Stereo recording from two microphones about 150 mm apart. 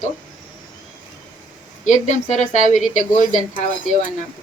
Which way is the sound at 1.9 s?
50° left (ahead or behind).